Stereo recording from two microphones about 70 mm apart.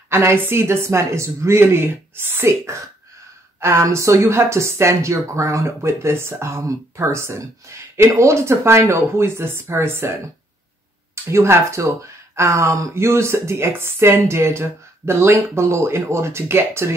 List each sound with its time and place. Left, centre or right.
0.1 s speech: right
11.2 s speech: right